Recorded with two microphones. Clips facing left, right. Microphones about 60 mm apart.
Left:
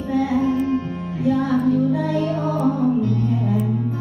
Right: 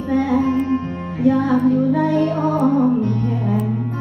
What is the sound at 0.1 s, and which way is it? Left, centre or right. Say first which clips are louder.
Music: right 2 dB; right.